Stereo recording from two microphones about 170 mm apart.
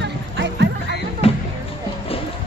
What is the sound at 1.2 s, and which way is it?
Music, 35° left (ahead or behind).